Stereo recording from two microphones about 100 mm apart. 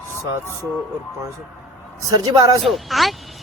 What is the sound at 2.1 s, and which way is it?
Speech, 40° right (ahead or behind).